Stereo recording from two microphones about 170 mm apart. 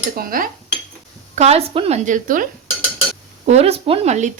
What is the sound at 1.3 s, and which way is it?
A woman's voice, 40° right (ahead or behind).